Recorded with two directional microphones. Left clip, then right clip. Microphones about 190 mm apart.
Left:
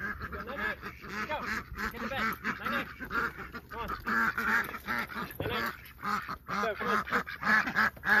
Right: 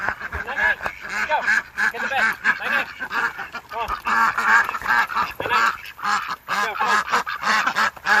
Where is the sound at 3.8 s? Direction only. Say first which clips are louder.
Right 11 dB; 25° left (ahead or behind).